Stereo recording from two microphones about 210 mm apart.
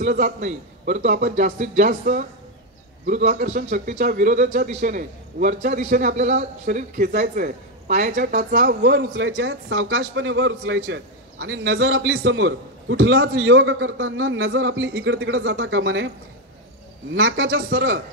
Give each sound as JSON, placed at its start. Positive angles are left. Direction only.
{"t": 0.0, "sound": "a man's voice", "side_deg": -40}
{"t": 9.1, "sound": "a man's voice", "side_deg": -65}
{"t": 17.1, "sound": "a man's voice", "side_deg": -70}